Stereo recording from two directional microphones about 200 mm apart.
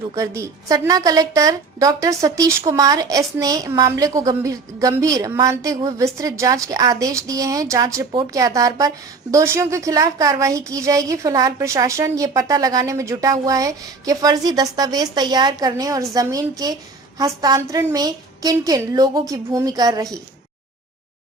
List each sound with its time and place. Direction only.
0.2 s a woman's voice: 15° right (ahead or behind)